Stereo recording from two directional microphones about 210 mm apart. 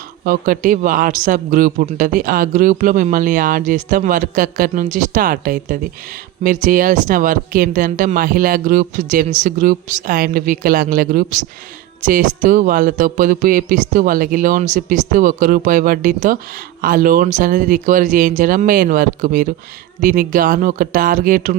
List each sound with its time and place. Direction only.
0.3 s a man's voice: 40° right (ahead or behind)